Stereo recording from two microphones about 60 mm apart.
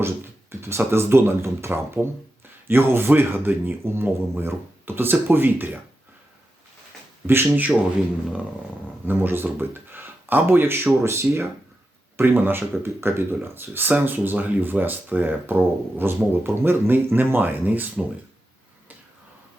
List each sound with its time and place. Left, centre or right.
0.6 s speech: right
7.3 s speech: right
9.0 s speech: right